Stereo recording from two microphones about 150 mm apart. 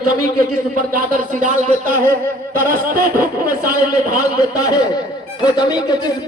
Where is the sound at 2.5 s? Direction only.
70° right (ahead or behind).